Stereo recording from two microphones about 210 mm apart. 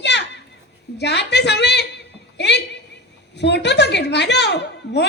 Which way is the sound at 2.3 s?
55° left (ahead or behind).